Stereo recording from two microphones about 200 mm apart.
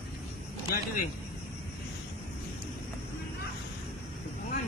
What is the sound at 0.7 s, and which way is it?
Speech, 40° left (ahead or behind).